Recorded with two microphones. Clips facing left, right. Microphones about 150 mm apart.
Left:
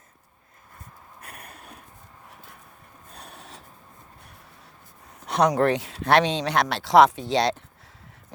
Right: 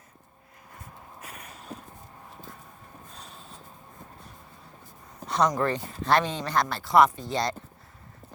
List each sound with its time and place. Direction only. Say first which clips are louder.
1.2 s a sound: left 1 dB; 55° left (ahead or behind)
3.2 s snort: left 6 dB; 65° left (ahead or behind)
5.2 s speech: left 4 dB; 65° left (ahead or behind)